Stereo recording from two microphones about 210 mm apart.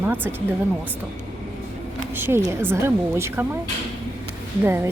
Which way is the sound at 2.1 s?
10° right (ahead or behind).